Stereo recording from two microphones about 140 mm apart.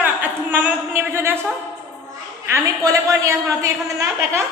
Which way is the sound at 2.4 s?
20° right (ahead or behind).